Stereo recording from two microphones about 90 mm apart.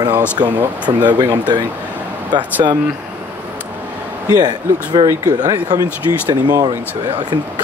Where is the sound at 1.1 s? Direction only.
50° right (ahead or behind).